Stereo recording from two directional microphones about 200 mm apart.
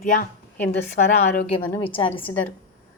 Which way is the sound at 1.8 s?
25° left (ahead or behind).